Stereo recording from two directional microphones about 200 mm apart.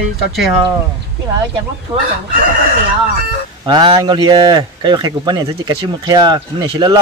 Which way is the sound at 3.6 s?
25° right (ahead or behind).